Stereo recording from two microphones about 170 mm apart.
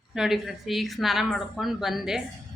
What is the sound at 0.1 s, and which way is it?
A woman's voice, centre (ahead or behind).